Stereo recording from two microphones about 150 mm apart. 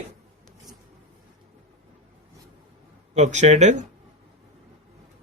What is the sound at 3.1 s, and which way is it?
Speech, 50° right (ahead or behind).